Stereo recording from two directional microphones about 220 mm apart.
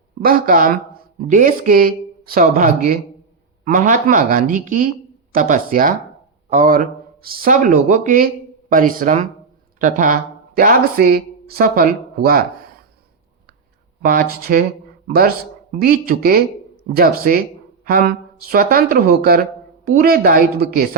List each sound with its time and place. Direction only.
0.2 s speech: 40° right (ahead or behind)
14.0 s speech: 40° right (ahead or behind)